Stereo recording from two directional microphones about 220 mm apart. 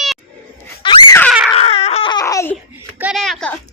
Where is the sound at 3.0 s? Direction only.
Centre (ahead or behind).